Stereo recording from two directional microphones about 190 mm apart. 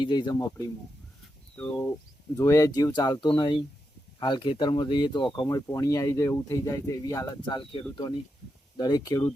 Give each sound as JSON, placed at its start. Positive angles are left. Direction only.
{"t": 0.0, "sound": "speech", "side_deg": 25}
{"t": 1.5, "sound": "speech", "side_deg": 10}